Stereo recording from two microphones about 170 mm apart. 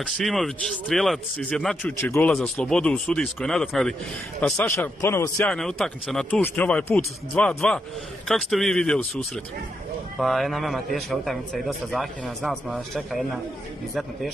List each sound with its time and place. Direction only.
0.0 s a man's voice: centre (ahead or behind)
5.5 s a man's voice: 5° left (ahead or behind)